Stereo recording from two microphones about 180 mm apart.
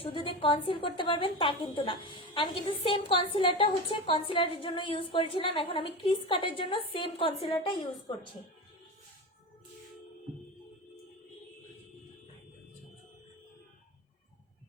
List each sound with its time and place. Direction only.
0.0 s a woman's voice: 30° left (ahead or behind)